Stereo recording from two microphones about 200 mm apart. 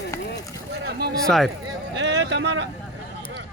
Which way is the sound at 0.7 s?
55° right (ahead or behind).